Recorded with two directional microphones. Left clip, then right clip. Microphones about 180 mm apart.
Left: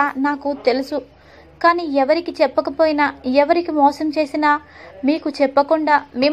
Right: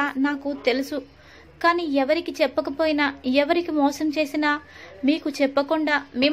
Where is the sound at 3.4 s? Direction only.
5° right (ahead or behind).